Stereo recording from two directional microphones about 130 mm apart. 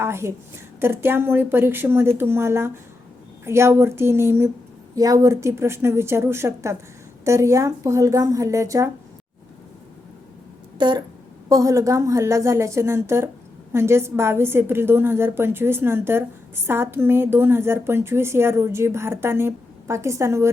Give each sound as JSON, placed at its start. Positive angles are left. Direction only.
{"t": 0.0, "sound": "a woman's voice", "side_deg": -20}
{"t": 10.8, "sound": "speech", "side_deg": -35}
{"t": 11.4, "sound": "a woman's voice", "side_deg": -25}